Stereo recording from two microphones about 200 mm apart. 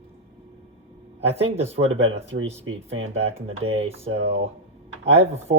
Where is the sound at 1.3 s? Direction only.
30° right (ahead or behind).